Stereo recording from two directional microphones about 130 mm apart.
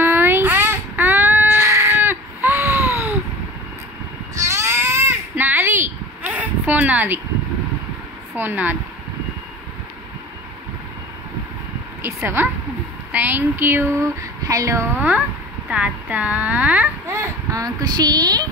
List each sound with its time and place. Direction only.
0.0 s baby cry: 15° right (ahead or behind)
4.4 s baby cry: 20° right (ahead or behind)
8.4 s speech: 15° right (ahead or behind)
12.0 s a woman's voice: 20° right (ahead or behind)
13.1 s a sound: 15° right (ahead or behind)
15.0 s speech: 10° right (ahead or behind)
17.1 s a child's voice: 25° right (ahead or behind)